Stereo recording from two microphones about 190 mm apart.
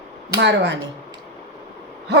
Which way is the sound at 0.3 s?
70° right (ahead or behind).